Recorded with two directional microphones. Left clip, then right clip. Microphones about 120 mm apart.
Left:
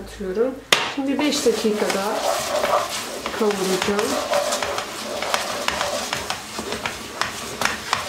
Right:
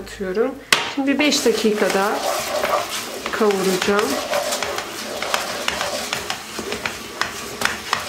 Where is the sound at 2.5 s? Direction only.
Centre (ahead or behind).